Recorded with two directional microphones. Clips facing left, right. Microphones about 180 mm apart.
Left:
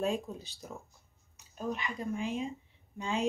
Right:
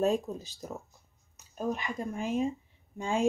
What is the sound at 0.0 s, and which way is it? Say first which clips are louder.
Speech: right 5 dB; 40° right (ahead or behind).